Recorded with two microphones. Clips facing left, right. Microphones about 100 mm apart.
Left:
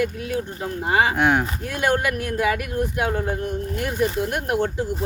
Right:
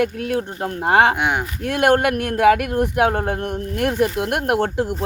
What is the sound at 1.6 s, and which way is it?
Speech, 65° right (ahead or behind).